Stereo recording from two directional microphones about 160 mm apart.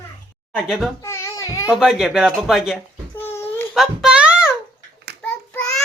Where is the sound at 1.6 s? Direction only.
5° right (ahead or behind).